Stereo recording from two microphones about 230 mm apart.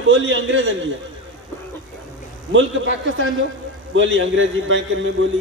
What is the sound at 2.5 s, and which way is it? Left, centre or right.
A man's voice, right.